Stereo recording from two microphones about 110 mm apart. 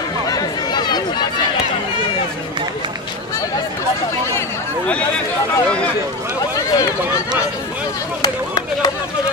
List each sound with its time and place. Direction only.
0.3 s chatter: 40° left (ahead or behind)
6.5 s run: 30° left (ahead or behind)